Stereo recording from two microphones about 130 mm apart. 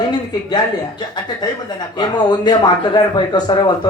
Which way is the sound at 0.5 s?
35° left (ahead or behind).